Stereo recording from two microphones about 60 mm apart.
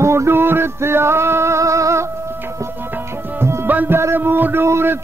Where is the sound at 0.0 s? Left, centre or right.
Right.